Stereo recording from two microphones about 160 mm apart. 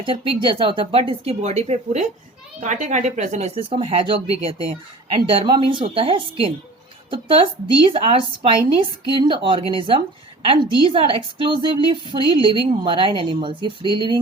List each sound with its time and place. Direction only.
0.0 s a woman's voice: 30° right (ahead or behind)